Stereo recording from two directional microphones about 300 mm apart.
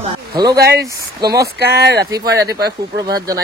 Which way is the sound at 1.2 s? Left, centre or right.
Centre.